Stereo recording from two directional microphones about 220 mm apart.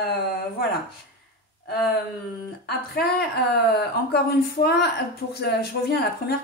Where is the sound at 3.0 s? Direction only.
45° left (ahead or behind).